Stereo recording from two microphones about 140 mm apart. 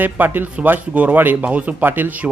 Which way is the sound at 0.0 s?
15° right (ahead or behind).